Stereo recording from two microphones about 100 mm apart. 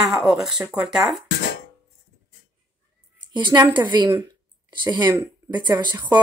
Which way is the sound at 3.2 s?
50° right (ahead or behind).